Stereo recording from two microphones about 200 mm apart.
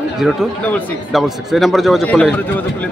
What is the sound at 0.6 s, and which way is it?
A man's voice, 5° left (ahead or behind).